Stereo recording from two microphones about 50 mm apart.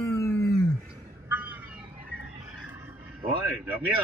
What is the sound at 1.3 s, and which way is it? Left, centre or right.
Vehicle, right.